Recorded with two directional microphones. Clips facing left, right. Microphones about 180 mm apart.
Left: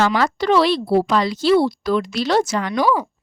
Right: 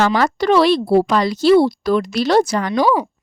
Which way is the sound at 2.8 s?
20° right (ahead or behind).